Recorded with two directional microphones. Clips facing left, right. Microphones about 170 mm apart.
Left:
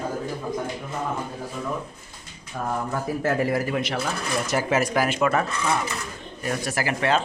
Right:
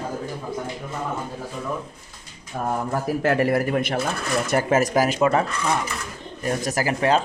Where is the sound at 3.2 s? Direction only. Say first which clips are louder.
Right 3 dB; 70° right (ahead or behind); by 5.2 s 40° right (ahead or behind).